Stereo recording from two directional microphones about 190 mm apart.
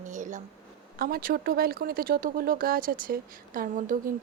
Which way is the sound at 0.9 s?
50° right (ahead or behind).